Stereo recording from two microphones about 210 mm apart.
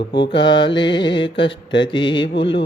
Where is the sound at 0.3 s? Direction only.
20° left (ahead or behind).